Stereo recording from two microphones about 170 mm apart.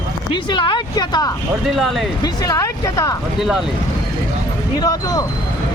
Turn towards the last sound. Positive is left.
turn(degrees=20)  # may be behind; listen again after turning